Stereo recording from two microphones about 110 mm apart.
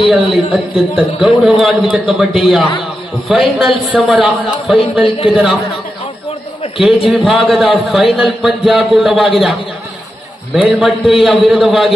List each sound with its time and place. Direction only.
0.1 s a man's voice: centre (ahead or behind)
5.0 s speech: 60° left (ahead or behind)
6.6 s a man's voice: 55° left (ahead or behind)
7.1 s a man's voice: centre (ahead or behind)
10.5 s a man's voice: 5° right (ahead or behind)